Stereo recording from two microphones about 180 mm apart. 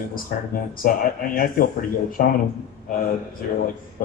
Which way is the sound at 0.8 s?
55° left (ahead or behind).